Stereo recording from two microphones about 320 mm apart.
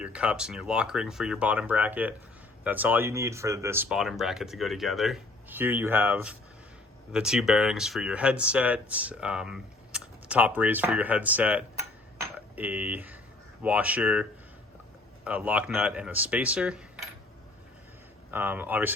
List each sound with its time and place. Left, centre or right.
0.0 s speech: centre
18.3 s speech: centre